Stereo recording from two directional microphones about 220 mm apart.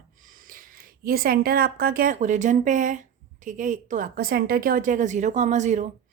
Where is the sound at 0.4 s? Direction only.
40° right (ahead or behind).